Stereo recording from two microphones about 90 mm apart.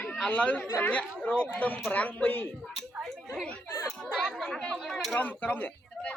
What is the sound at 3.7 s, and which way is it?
Children playing, 40° left (ahead or behind).